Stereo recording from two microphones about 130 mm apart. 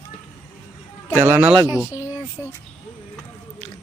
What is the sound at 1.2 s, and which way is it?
Speech, 15° right (ahead or behind).